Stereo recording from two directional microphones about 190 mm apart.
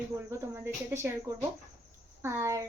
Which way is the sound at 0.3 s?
15° right (ahead or behind).